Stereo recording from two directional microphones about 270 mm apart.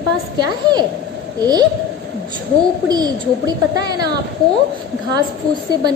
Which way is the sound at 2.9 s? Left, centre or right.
Centre.